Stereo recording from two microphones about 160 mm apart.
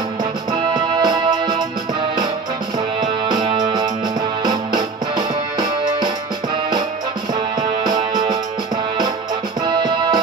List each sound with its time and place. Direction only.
0.2 s music: 25° right (ahead or behind)
3.0 s music: 25° right (ahead or behind)
7.3 s music: 25° right (ahead or behind)
9.7 s music: 30° right (ahead or behind)